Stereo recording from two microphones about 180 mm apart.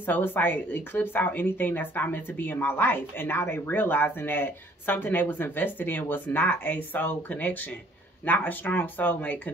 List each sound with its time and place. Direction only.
0.0 s speech: 10° left (ahead or behind)